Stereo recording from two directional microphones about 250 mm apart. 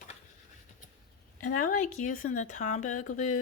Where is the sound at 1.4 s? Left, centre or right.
Left.